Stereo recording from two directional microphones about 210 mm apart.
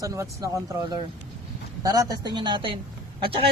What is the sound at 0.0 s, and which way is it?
Speech, 15° right (ahead or behind).